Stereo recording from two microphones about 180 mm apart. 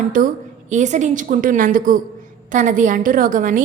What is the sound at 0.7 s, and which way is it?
A woman's voice, 40° right (ahead or behind).